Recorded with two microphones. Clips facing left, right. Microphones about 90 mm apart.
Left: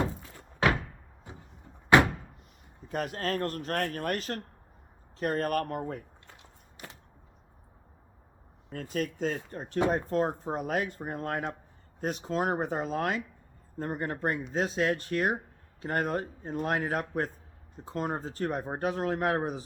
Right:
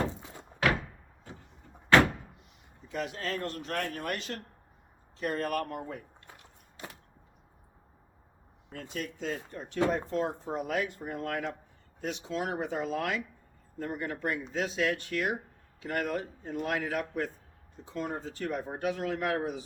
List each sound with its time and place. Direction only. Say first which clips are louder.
0.2 s thunk: right 2 dB; 20° right (ahead or behind)
1.3 s a sound: even; 20° left (ahead or behind)
1.9 s door: left 1 dB; 15° left (ahead or behind)
2.9 s a man's voice: left 3 dB; 45° left (ahead or behind)
6.8 s a sound: right 2 dB; 20° left (ahead or behind)
8.7 s a man's voice: left 6 dB; 45° left (ahead or behind)